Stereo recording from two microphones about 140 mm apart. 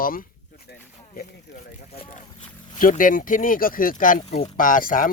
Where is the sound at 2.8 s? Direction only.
75° left (ahead or behind).